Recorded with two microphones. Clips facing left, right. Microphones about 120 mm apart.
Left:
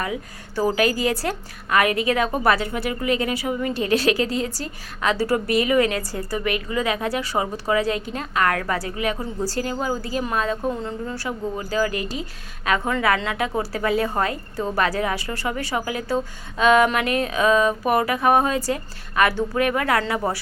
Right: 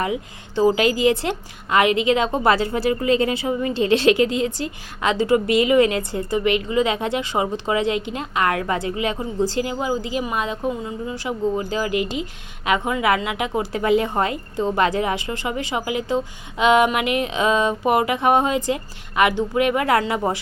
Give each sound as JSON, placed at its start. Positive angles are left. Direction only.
{"t": 0.0, "sound": "a woman's voice", "side_deg": -20}
{"t": 4.3, "sound": "a woman's voice", "side_deg": 35}
{"t": 4.5, "sound": "a woman's voice", "side_deg": -20}